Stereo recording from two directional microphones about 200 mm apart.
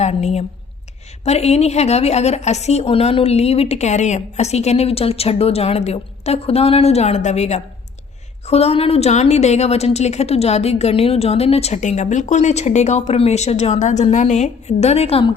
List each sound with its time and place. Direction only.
0.0 s a woman's voice: 35° left (ahead or behind)